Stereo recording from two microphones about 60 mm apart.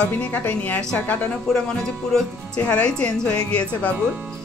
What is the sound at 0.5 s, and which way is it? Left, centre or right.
Speech, left.